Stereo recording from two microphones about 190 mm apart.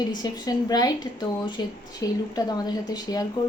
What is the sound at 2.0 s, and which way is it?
Speech, 20° left (ahead or behind).